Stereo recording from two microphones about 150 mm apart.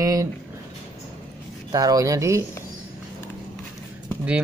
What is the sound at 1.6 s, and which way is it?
Speech, 25° right (ahead or behind).